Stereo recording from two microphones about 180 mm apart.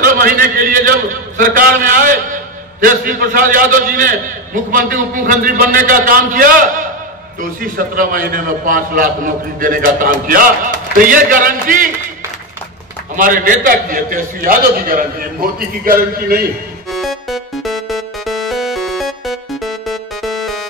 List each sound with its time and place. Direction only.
0.0 s a man's voice: 50° right (ahead or behind)
13.1 s a man's voice: 50° right (ahead or behind)
16.9 s music: centre (ahead or behind)